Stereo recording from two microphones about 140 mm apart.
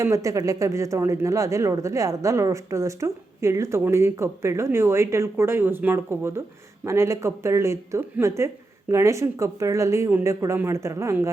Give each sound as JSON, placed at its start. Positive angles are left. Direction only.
{"t": 0.0, "sound": "speech", "side_deg": -20}